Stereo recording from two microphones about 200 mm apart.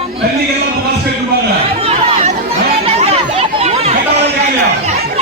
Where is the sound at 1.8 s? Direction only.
30° right (ahead or behind).